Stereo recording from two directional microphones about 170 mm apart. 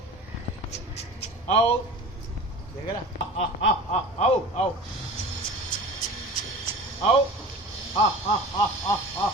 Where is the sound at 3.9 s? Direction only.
40° left (ahead or behind).